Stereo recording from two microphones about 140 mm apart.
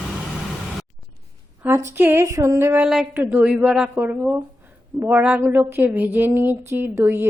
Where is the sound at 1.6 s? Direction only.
20° right (ahead or behind).